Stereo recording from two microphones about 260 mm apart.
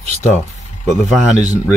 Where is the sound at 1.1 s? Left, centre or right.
Centre.